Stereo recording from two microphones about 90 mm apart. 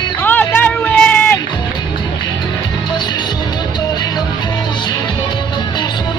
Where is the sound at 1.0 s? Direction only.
10° left (ahead or behind).